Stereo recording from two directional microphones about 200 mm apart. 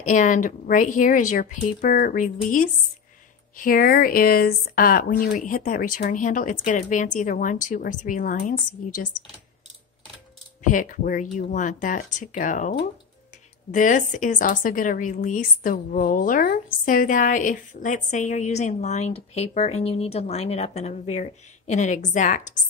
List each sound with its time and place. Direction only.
0.1 s a woman's voice: 40° left (ahead or behind)
10.6 s a woman's voice: 40° left (ahead or behind)